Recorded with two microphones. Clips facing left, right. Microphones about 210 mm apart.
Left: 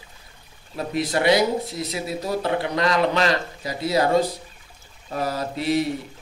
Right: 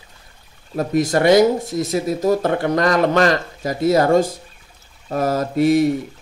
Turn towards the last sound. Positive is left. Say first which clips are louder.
# right 8 dB
turn(degrees=-45)  # may be behind; listen again after turning